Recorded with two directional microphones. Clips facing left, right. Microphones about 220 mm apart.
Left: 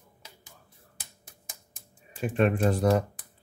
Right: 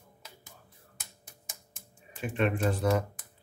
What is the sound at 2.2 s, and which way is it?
Speech, 40° left (ahead or behind).